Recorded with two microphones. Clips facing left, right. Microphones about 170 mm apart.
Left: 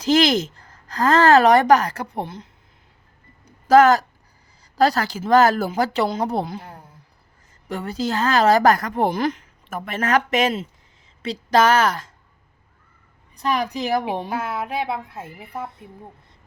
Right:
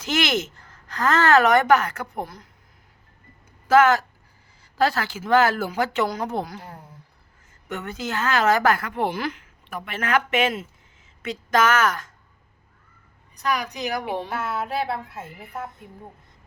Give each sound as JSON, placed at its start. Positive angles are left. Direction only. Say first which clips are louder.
{"t": 0.0, "sound": "a woman's voice", "louder": "left 7 dB", "side_deg": 35}
{"t": 3.4, "sound": "a sound", "louder": "left 4 dB", "side_deg": 40}
{"t": 4.8, "sound": "a woman's voice", "louder": "left 4 dB", "side_deg": 40}
{"t": 7.7, "sound": "a woman's voice", "louder": "left 5 dB", "side_deg": 35}
{"t": 13.4, "sound": "a woman's voice", "louder": "left 3 dB", "side_deg": 30}
{"t": 14.8, "sound": "speech", "louder": "left 2 dB", "side_deg": 20}